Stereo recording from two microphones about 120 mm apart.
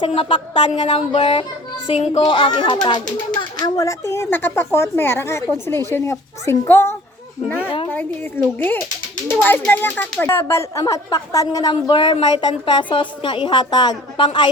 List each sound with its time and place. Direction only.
0.0 s a woman's voice: 50° left (ahead or behind)
0.5 s a sound: 70° left (ahead or behind)
2.2 s a child's voice: 40° left (ahead or behind)
11.7 s a woman's voice: 45° left (ahead or behind)